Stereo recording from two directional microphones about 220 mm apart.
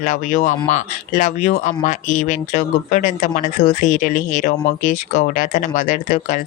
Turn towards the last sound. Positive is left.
turn(degrees=35)  # may be behind; listen again after turning